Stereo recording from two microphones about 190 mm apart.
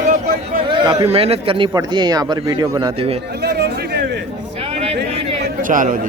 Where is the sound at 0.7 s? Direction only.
25° right (ahead or behind).